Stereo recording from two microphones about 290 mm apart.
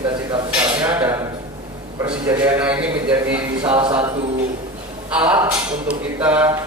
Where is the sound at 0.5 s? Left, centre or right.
Centre.